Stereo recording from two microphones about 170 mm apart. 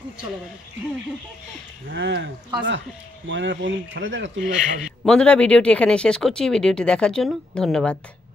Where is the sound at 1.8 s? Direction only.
90° right.